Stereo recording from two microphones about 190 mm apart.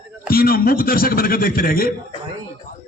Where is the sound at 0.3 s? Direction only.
50° left (ahead or behind).